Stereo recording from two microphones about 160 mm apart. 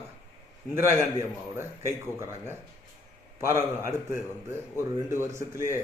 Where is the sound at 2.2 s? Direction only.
15° right (ahead or behind).